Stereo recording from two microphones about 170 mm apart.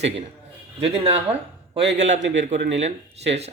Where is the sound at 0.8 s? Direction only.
35° right (ahead or behind).